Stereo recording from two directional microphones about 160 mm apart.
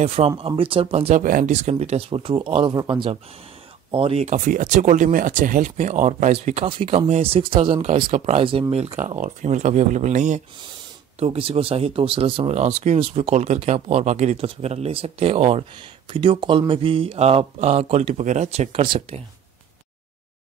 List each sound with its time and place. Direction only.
0.0 s speech: 40° right (ahead or behind)
1.2 s speech: 55° right (ahead or behind); by 3.1 s 25° right (ahead or behind)
3.9 s speech: 35° right (ahead or behind)
4.5 s speech: 50° right (ahead or behind)
11.1 s speech: 35° right (ahead or behind)